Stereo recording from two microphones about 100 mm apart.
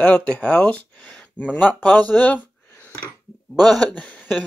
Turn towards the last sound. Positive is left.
turn(degrees=15)  # may be behind; listen again after turning